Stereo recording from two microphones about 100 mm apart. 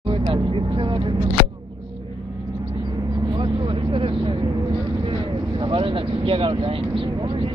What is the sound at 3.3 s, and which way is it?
Vehicle, 65° right (ahead or behind).